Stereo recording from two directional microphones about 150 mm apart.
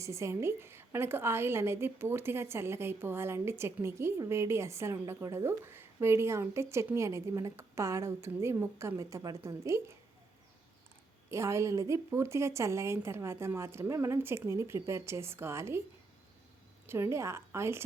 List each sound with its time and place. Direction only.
0.0 s a woman's voice: 20° right (ahead or behind)
11.3 s a woman's voice: 20° right (ahead or behind)
16.8 s a woman's voice: 15° right (ahead or behind)